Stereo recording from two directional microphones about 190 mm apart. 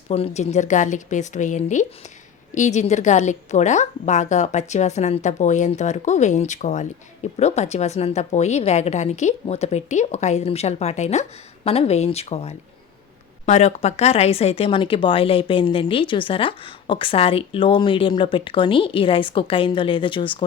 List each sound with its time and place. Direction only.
0.1 s a woman's voice: 35° left (ahead or behind)